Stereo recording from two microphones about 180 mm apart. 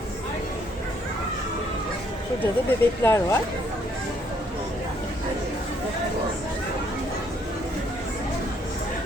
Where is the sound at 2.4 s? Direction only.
15° left (ahead or behind).